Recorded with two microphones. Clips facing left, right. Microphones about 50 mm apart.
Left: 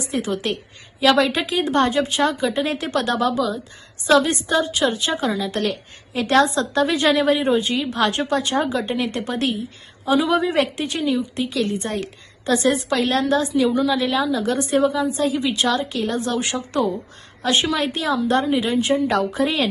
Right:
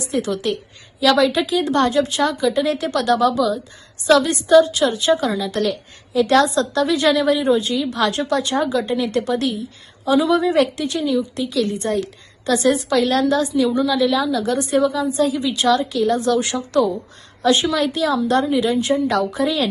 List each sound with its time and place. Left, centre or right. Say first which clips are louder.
0.0 s a woman's voice: right 2 dB; left